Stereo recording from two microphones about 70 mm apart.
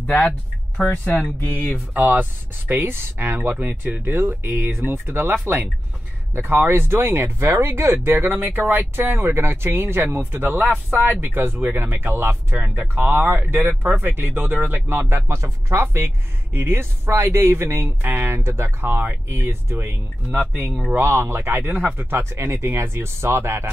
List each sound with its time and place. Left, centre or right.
0.0 s speech: centre
2.0 s speech: right
21.0 s speech: right